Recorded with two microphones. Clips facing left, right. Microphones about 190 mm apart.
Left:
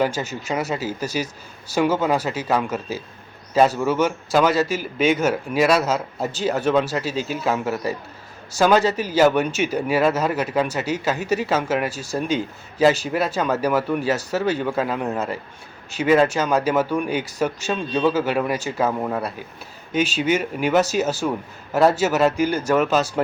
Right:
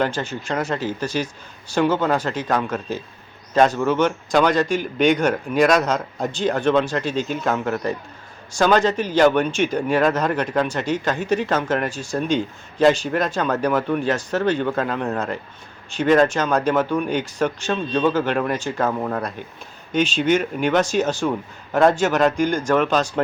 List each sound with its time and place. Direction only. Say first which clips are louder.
0.0 s speech: even; 10° left (ahead or behind)